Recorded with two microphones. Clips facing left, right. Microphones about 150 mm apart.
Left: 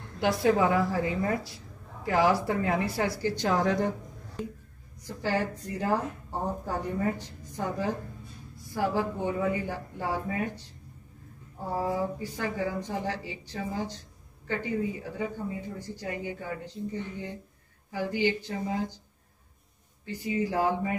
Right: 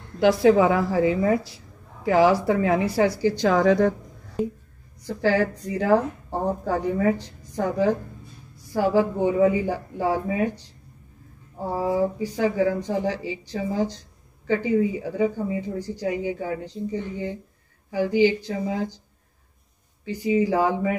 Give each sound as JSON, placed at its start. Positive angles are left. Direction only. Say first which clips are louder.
{"t": 0.2, "sound": "a woman's voice", "louder": "right 7 dB", "side_deg": -90}
{"t": 2.0, "sound": "a woman's voice", "louder": "right 6 dB", "side_deg": -90}
{"t": 5.0, "sound": "a woman's voice", "louder": "right 8 dB", "side_deg": -90}
{"t": 11.8, "sound": "a woman's voice", "louder": "right 8 dB", "side_deg": -90}
{"t": 20.2, "sound": "a woman's voice", "louder": "right 6 dB", "side_deg": -90}